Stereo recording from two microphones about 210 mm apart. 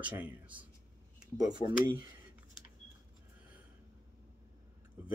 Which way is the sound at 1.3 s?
20° right (ahead or behind).